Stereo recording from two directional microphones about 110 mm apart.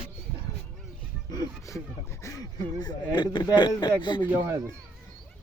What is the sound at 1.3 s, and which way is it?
Speech, 30° left (ahead or behind).